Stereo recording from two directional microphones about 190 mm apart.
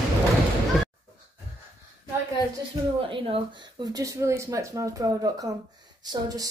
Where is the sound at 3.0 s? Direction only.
30° right (ahead or behind).